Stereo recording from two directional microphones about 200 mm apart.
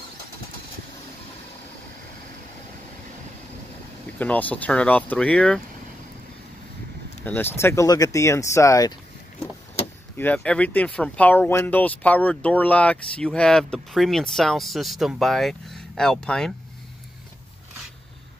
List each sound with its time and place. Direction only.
4.2 s speech: 10° left (ahead or behind)
7.2 s speech: 10° left (ahead or behind)
10.1 s speech: 10° left (ahead or behind)